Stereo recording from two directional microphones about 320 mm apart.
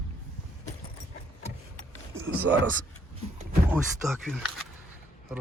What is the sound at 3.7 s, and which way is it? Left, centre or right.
Speech, centre.